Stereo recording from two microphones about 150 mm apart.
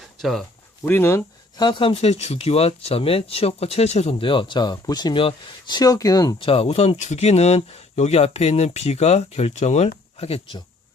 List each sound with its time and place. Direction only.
0.2 s speech: centre (ahead or behind)
0.9 s speech: 15° left (ahead or behind)
1.5 s speech: 30° left (ahead or behind)
6.4 s speech: 40° left (ahead or behind)